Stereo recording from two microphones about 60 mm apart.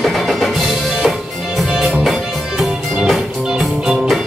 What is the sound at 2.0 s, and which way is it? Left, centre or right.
Music, centre.